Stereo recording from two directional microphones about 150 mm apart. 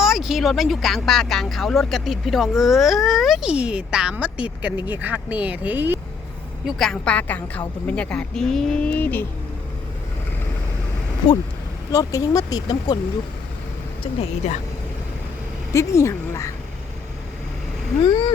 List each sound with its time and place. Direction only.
0.0 s speech: centre (ahead or behind)
6.7 s speech: centre (ahead or behind)
11.9 s speech: 20° left (ahead or behind)
14.0 s speech: 45° left (ahead or behind)
15.7 s speech: 20° left (ahead or behind)
18.0 s speech: 30° left (ahead or behind)